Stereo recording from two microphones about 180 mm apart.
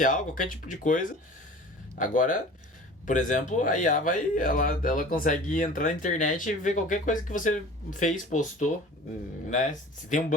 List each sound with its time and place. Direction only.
0.0 s speech: 50° left (ahead or behind)
10.1 s speech: 45° left (ahead or behind)